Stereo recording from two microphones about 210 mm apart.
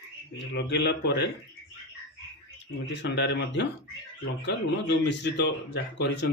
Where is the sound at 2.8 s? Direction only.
55° left (ahead or behind).